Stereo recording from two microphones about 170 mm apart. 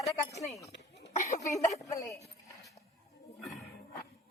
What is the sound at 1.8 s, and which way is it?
Speech, 20° left (ahead or behind).